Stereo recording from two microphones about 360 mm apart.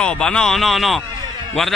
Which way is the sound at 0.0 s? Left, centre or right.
Centre.